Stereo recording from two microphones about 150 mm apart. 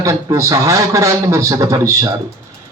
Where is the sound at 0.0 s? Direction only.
20° right (ahead or behind).